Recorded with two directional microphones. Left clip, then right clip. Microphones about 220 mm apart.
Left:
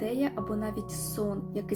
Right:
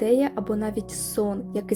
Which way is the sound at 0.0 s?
40° right (ahead or behind).